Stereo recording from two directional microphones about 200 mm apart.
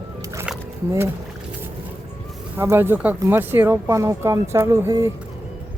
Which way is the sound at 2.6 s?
10° right (ahead or behind).